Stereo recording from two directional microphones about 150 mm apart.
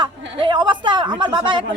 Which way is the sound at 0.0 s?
30° right (ahead or behind).